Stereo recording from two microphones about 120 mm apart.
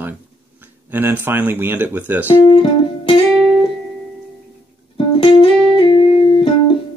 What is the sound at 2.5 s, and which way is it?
Music, 45° left (ahead or behind).